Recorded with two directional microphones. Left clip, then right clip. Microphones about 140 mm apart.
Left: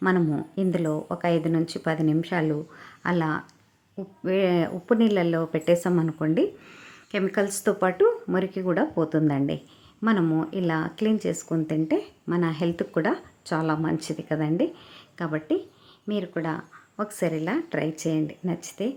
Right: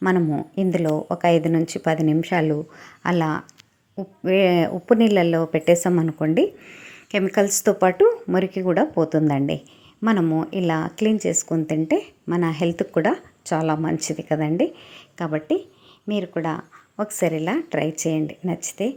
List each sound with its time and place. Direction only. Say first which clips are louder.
0.0 s a woman's voice: right 3 dB; 15° right (ahead or behind)